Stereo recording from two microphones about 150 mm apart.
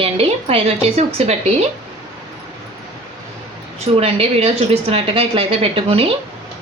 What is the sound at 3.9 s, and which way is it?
A woman's voice, 40° right (ahead or behind).